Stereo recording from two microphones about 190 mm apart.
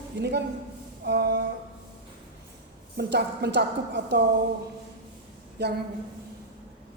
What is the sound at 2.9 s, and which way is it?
A woman's voice, 60° right (ahead or behind).